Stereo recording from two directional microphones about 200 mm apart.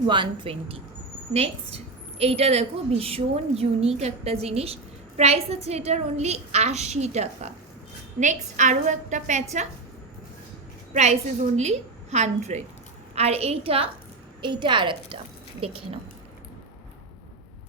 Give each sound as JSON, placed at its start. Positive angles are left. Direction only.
{"t": 0.1, "sound": "a woman's voice", "side_deg": -25}
{"t": 10.9, "sound": "a woman's voice", "side_deg": -35}